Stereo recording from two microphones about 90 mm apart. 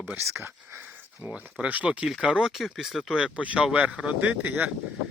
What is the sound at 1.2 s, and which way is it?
Speech, 15° right (ahead or behind).